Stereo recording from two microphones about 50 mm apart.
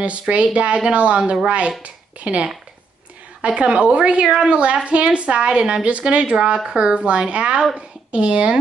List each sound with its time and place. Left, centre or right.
0.3 s a woman's voice: right